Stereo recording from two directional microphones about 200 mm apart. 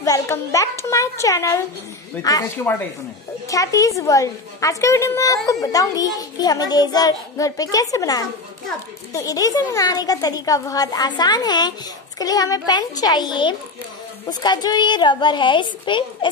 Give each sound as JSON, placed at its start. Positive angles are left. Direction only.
{"t": 0.0, "sound": "a child's voice", "side_deg": 15}